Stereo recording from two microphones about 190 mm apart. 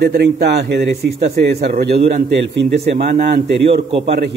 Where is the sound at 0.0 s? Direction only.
60° right (ahead or behind).